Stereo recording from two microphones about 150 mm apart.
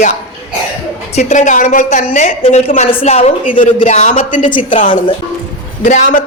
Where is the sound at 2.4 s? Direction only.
45° left (ahead or behind).